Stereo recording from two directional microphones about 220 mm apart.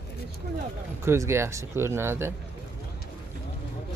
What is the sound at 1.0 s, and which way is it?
Speech, 10° right (ahead or behind).